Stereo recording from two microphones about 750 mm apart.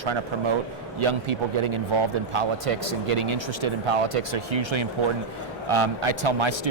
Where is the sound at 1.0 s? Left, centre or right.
Right.